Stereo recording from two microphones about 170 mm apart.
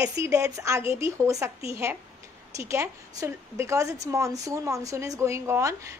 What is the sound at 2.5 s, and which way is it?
Speech, 15° right (ahead or behind).